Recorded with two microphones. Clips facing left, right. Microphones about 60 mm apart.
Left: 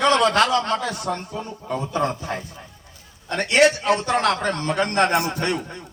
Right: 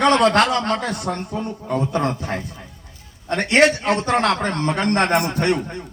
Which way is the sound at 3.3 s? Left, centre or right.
Right.